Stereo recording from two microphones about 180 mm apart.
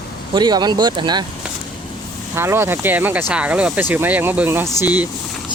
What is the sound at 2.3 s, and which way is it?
Speech, 15° right (ahead or behind).